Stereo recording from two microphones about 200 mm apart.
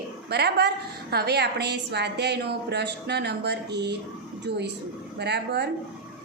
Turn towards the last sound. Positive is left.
turn(degrees=-55)  # may be behind; listen again after turning